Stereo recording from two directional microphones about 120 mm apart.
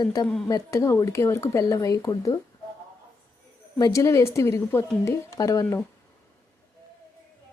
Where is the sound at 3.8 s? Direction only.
25° left (ahead or behind).